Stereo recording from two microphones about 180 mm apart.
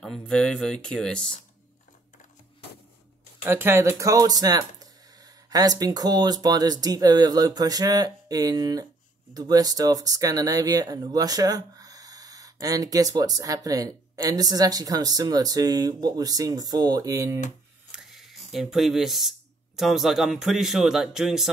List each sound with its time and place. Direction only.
0.0 s speech: 5° left (ahead or behind)
3.4 s speech: 10° right (ahead or behind)
17.9 s speech: centre (ahead or behind)